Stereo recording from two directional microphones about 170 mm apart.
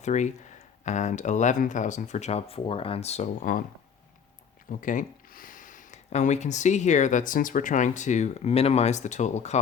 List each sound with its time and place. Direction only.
0.0 s speech: 45° left (ahead or behind)
4.8 s speech: 50° left (ahead or behind)